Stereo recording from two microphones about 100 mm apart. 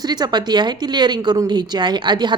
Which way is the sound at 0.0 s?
45° right (ahead or behind).